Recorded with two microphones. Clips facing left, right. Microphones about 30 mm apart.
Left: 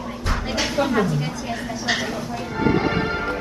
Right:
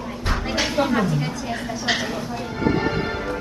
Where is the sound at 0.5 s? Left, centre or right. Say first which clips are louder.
Even; centre.